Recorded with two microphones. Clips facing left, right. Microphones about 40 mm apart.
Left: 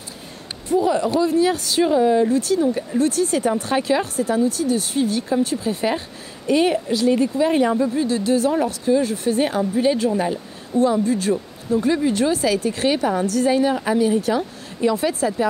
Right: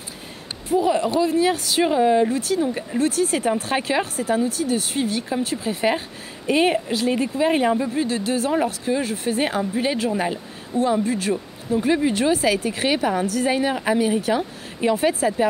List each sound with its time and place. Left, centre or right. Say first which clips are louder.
0.7 s a man's voice: left 1 dB; centre
15.1 s speech: even; centre